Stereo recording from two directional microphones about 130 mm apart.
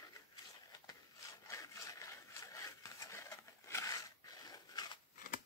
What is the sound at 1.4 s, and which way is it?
Sawing, 25° left (ahead or behind).